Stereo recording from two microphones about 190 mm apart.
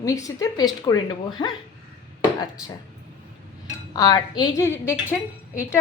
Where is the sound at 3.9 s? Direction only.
20° left (ahead or behind).